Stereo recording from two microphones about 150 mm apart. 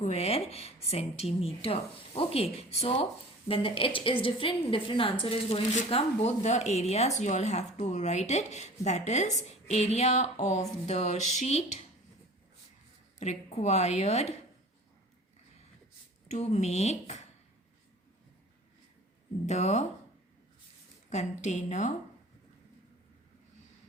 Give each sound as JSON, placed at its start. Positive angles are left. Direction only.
{"t": 0.0, "sound": "a woman's voice", "side_deg": 45}
{"t": 13.1, "sound": "speech", "side_deg": 50}
{"t": 16.3, "sound": "speech", "side_deg": 45}
{"t": 19.5, "sound": "speech", "side_deg": 50}
{"t": 21.1, "sound": "speech", "side_deg": 50}